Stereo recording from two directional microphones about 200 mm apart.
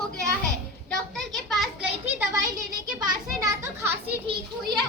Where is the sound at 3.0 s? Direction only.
20° right (ahead or behind).